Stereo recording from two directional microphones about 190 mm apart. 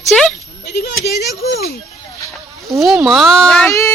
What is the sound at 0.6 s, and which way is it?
Speech, 60° left (ahead or behind).